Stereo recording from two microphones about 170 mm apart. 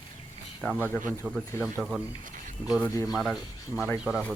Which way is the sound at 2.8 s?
20° left (ahead or behind).